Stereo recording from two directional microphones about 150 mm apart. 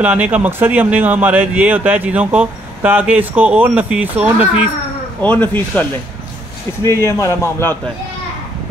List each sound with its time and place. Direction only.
0.0 s speech: 10° right (ahead or behind)
5.2 s speech: 10° left (ahead or behind)
7.1 s a man's voice: 20° left (ahead or behind)